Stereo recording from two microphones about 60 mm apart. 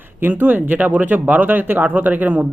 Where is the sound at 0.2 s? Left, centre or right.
Right.